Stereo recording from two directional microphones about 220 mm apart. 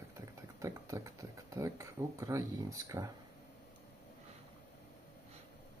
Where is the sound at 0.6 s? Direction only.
15° right (ahead or behind).